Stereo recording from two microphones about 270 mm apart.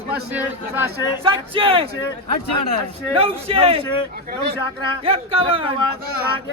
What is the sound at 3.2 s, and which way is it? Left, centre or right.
Speech, right.